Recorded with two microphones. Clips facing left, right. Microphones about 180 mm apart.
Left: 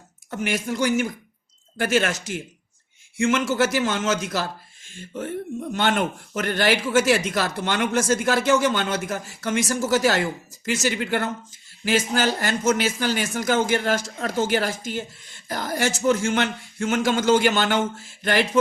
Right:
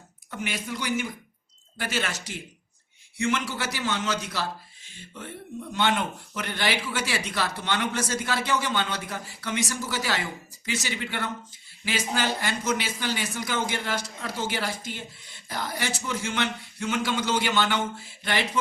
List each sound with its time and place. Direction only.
0.3 s a man's voice: 45° left (ahead or behind)